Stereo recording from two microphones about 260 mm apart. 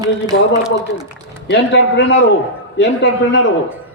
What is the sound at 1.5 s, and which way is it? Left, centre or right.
A man's voice, left.